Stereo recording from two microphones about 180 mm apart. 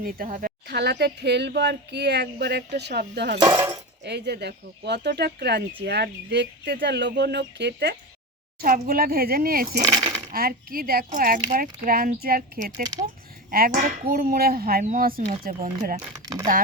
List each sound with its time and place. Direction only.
0.0 s speech: 50° right (ahead or behind); by 3.4 s 70° right (ahead or behind)
3.4 s speech: 15° right (ahead or behind)
4.0 s speech: 70° right (ahead or behind)
8.6 s speech: 55° right (ahead or behind)
12.8 s speech: 20° right (ahead or behind)
13.5 s speech: 50° right (ahead or behind)
16.1 s speech: 20° right (ahead or behind)